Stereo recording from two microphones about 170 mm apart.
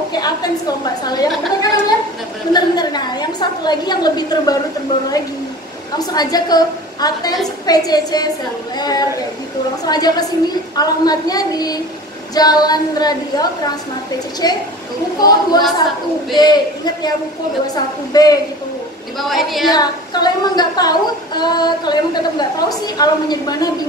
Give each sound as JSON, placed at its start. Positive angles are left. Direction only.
{"t": 0.1, "sound": "a woman's voice", "side_deg": 25}
{"t": 2.5, "sound": "child singing", "side_deg": 25}
{"t": 5.9, "sound": "child singing", "side_deg": 25}
{"t": 18.1, "sound": "child singing", "side_deg": 20}
{"t": 19.2, "sound": "female singing", "side_deg": 0}
{"t": 19.7, "sound": "child singing", "side_deg": 25}